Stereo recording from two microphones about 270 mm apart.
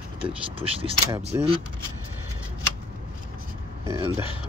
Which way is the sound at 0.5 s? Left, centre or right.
Centre.